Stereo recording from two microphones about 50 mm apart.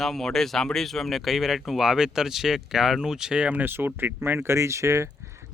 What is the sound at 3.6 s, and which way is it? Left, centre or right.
Speech, right.